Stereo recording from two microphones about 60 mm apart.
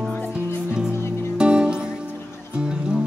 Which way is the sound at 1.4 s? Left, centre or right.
Centre.